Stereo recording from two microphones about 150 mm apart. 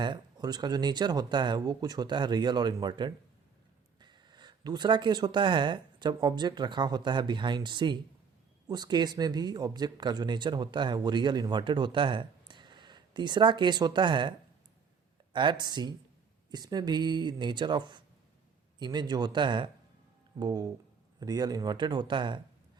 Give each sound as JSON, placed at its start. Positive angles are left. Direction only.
{"t": 0.0, "sound": "speech", "side_deg": -30}